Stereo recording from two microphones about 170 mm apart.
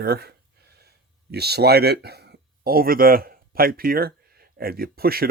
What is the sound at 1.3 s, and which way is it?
Speech, 70° right (ahead or behind).